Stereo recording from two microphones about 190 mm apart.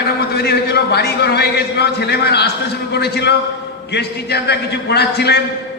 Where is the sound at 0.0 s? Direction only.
60° left (ahead or behind).